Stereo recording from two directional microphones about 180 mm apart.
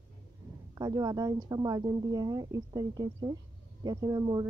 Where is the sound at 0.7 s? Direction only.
20° right (ahead or behind).